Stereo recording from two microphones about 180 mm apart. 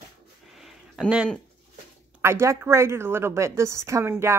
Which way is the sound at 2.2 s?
15° right (ahead or behind).